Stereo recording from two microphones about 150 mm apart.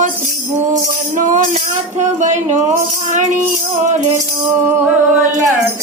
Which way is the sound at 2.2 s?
55° right (ahead or behind).